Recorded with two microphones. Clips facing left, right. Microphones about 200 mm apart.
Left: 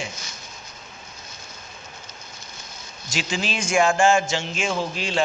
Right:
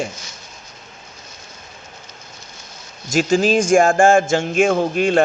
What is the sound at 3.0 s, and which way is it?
Speech, 50° right (ahead or behind).